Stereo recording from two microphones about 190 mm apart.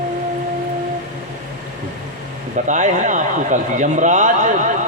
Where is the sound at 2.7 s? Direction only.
40° right (ahead or behind).